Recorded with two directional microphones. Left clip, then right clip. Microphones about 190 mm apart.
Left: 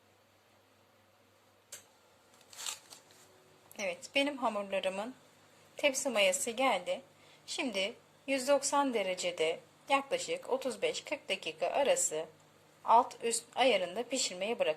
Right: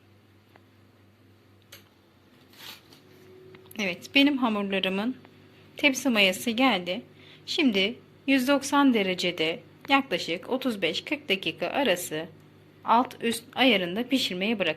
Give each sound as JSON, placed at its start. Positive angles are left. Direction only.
{"t": 3.7, "sound": "a woman's voice", "side_deg": 5}